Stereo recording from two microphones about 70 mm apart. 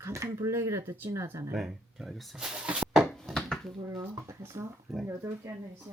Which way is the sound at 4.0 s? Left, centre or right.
Right.